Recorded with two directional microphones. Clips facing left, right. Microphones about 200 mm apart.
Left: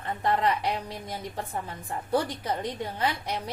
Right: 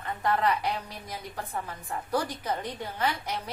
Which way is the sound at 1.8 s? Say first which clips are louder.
Left 3 dB; 30° left (ahead or behind).